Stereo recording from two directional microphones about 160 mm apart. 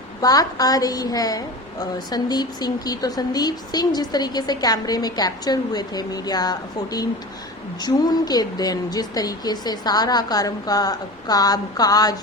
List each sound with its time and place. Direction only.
0.2 s a woman's voice: 25° left (ahead or behind)